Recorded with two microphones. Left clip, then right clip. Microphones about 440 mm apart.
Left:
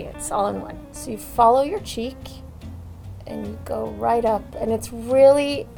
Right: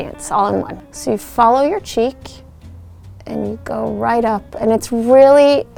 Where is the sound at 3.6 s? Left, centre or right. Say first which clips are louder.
Right 4 dB; right.